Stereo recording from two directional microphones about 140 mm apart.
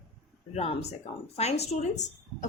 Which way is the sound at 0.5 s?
50° left (ahead or behind).